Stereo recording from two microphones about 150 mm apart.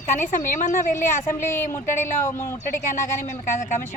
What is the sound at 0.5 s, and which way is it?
Speech, 60° left (ahead or behind).